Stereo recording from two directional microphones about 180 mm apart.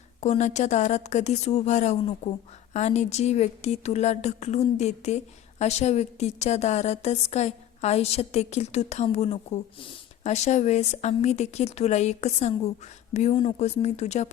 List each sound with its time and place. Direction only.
0.2 s speech: 40° left (ahead or behind)